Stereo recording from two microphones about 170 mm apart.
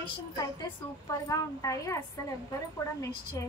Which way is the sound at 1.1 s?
20° left (ahead or behind).